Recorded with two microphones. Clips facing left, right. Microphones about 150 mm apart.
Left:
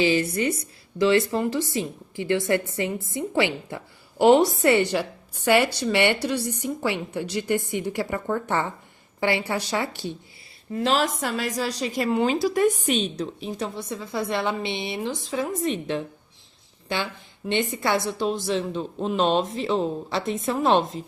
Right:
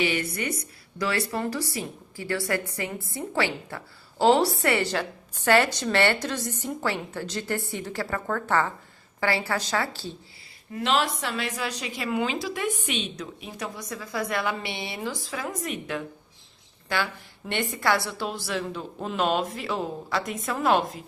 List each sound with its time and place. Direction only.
0.0 s a woman's voice: 30° left (ahead or behind)
10.8 s a woman's voice: 35° left (ahead or behind)